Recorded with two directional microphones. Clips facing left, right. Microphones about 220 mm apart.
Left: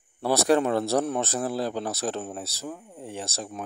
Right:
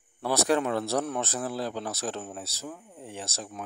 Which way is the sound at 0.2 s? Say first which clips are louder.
Left 4 dB; 35° left (ahead or behind).